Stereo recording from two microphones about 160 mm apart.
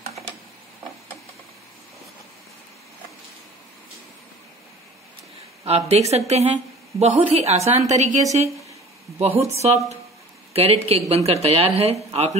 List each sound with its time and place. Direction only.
5.6 s a woman's voice: 35° right (ahead or behind)